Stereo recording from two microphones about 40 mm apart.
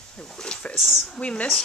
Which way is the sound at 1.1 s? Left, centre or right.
Left.